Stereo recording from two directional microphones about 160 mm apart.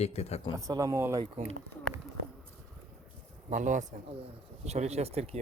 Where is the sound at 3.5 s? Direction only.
50° right (ahead or behind).